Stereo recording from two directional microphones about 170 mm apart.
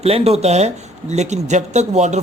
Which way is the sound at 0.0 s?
40° right (ahead or behind).